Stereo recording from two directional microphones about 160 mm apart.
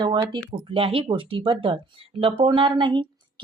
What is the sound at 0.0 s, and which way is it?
Speech, 30° right (ahead or behind).